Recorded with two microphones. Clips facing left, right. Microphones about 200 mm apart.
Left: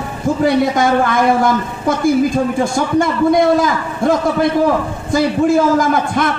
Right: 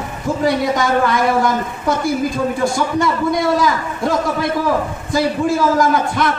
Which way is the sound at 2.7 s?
50° left (ahead or behind).